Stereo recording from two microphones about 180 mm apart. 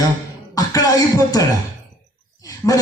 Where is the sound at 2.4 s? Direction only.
20° left (ahead or behind).